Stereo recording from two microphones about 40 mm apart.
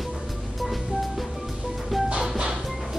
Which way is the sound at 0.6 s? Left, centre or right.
Centre.